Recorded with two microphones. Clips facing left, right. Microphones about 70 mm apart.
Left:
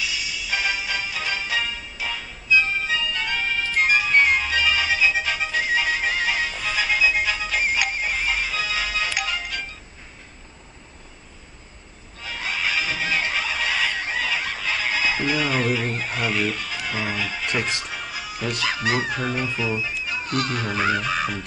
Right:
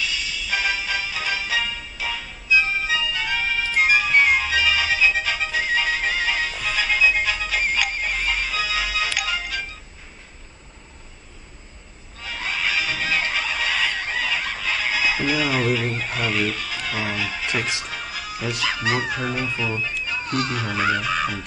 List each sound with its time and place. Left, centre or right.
0.0 s music: centre
12.2 s a sound: centre
19.0 s speech: centre